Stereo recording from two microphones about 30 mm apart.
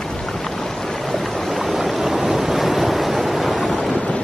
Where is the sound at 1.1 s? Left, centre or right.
Centre.